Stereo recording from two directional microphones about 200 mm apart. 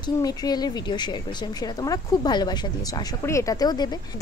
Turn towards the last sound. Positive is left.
turn(degrees=20)  # may be behind; listen again after turning